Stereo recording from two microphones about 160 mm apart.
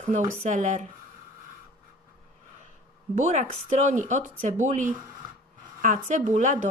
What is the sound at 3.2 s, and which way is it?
A woman's voice, 50° right (ahead or behind).